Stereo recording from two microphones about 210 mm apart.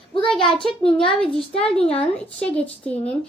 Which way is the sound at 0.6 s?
25° left (ahead or behind).